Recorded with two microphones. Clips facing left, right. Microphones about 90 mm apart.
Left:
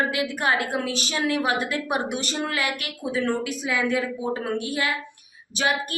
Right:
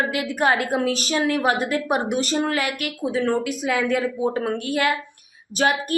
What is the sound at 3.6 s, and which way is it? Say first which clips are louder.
Speech: right 2 dB; 50° right (ahead or behind).